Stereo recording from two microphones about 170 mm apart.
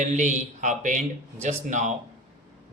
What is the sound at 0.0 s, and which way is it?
A man's voice, 45° right (ahead or behind).